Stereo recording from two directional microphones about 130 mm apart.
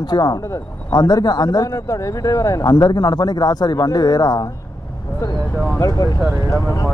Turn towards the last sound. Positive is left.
turn(degrees=30)  # may be behind; listen again after turning